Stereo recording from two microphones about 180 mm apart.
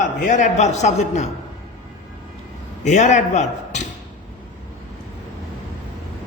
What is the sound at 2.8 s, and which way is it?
Speech, 40° left (ahead or behind).